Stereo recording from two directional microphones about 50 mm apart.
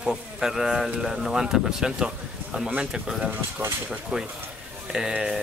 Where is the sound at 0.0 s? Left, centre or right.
Centre.